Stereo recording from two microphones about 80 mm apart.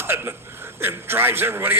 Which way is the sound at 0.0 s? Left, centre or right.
Right.